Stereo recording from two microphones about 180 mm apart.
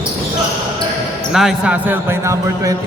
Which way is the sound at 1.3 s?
Centre (ahead or behind).